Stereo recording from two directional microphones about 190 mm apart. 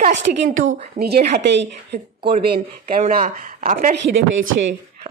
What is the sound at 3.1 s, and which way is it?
Speech, 45° right (ahead or behind).